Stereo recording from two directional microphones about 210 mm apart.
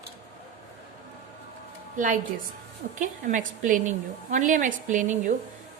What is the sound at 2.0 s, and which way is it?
A woman's voice, 40° right (ahead or behind).